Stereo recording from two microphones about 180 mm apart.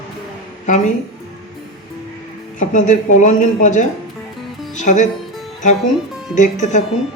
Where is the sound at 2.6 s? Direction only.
45° left (ahead or behind).